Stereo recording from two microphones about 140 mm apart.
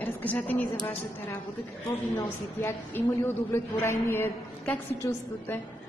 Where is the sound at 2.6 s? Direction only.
15° left (ahead or behind).